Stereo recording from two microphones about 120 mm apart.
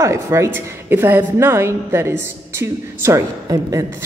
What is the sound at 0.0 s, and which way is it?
A woman's voice, 25° right (ahead or behind).